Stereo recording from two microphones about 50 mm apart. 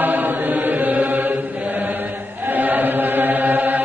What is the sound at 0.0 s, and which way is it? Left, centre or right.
Chant, right.